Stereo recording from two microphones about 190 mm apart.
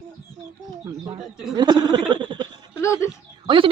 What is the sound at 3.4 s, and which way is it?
Speech, 25° right (ahead or behind).